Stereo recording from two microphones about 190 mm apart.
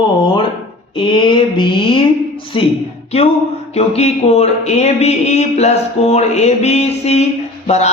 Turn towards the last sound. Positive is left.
turn(degrees=35)  # may be behind; listen again after turning